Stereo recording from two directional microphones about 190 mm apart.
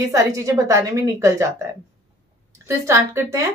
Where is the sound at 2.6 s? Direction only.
15° right (ahead or behind).